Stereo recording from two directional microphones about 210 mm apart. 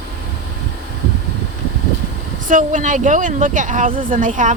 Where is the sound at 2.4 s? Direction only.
40° right (ahead or behind).